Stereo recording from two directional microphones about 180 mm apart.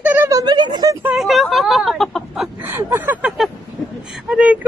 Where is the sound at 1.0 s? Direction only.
Centre (ahead or behind).